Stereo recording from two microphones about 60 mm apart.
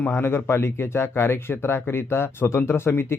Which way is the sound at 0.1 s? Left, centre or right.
Left.